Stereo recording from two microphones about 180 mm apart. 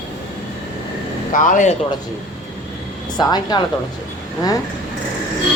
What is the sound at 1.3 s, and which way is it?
Speech, 45° left (ahead or behind).